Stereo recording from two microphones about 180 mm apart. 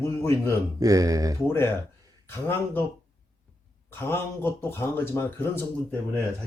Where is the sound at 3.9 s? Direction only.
15° left (ahead or behind).